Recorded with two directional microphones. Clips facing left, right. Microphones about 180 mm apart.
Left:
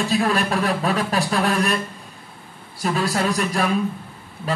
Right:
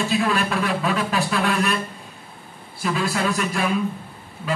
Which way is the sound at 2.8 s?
40° left (ahead or behind).